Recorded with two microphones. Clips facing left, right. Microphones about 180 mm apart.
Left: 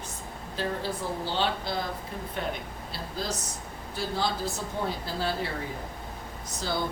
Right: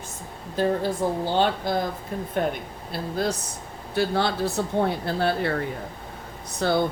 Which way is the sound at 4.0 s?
65° right (ahead or behind).